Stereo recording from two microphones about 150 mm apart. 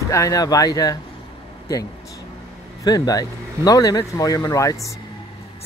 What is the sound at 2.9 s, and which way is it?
Speech, 25° left (ahead or behind).